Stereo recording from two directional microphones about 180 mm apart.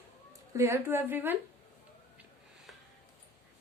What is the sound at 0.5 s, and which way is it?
Speech, 15° right (ahead or behind).